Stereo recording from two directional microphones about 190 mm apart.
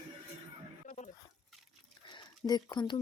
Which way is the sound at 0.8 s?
40° left (ahead or behind).